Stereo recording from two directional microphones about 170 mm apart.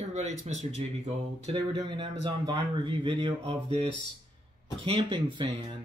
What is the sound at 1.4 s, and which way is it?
Speech, 30° right (ahead or behind).